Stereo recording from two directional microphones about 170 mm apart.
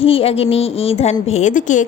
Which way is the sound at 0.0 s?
35° left (ahead or behind).